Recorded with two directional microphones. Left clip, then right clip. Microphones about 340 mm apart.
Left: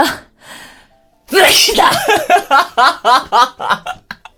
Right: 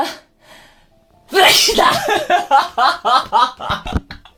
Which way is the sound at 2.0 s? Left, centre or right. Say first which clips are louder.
Left 4 dB; left.